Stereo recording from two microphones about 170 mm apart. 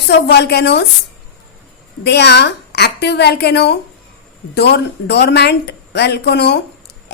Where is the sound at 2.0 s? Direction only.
80° left.